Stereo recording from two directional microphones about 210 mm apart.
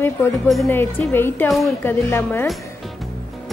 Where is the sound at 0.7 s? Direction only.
10° left (ahead or behind).